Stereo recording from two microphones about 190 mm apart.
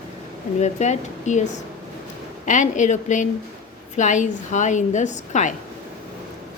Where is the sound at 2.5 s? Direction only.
40° left (ahead or behind).